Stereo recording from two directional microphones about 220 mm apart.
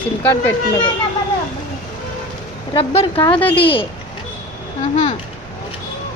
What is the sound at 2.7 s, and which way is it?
A woman's voice, 25° left (ahead or behind).